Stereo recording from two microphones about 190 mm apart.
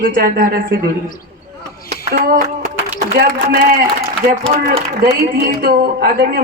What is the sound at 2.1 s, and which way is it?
Speech, 50° right (ahead or behind).